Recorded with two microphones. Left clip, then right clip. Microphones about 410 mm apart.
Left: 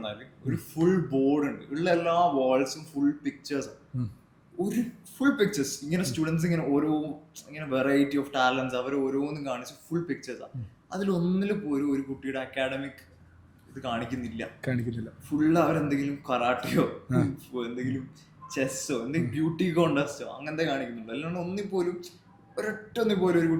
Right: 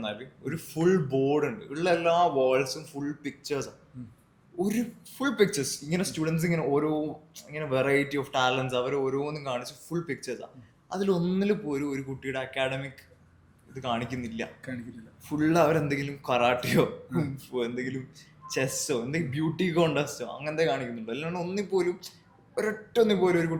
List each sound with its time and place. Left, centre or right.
0.0 s speech: right
3.9 s speech: left
4.6 s speech: right
13.8 s speech: right